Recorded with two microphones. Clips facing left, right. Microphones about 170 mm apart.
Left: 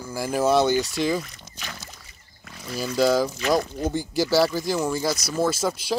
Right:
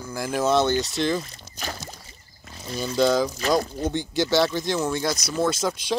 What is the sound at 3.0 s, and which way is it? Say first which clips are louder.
Speech: even; 5° left (ahead or behind).